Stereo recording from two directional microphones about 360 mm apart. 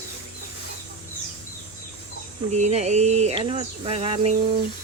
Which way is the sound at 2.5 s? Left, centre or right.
Centre.